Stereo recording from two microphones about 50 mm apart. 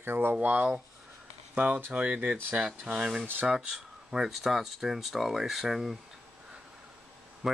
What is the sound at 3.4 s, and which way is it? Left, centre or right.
Speech, centre.